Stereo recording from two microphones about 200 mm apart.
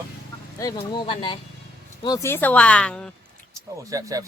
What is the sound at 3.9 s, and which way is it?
Speech, 15° right (ahead or behind).